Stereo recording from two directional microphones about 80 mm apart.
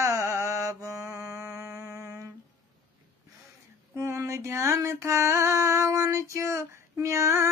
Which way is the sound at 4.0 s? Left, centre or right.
Right.